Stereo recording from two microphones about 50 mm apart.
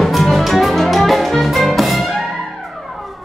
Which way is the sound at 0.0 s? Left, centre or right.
Centre.